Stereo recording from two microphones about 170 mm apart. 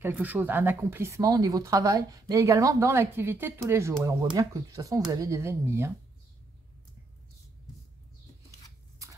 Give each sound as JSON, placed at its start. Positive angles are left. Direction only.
{"t": 0.0, "sound": "speech", "side_deg": -10}